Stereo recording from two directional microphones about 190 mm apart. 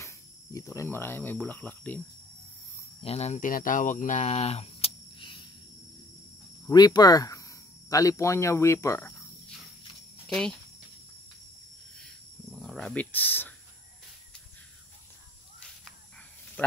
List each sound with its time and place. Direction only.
0.0 s cricket: 15° left (ahead or behind)
3.0 s speech: 35° left (ahead or behind)
6.7 s speech: 20° left (ahead or behind)
10.2 s speech: 5° left (ahead or behind)
12.0 s cricket: centre (ahead or behind)
16.6 s speech: 5° left (ahead or behind)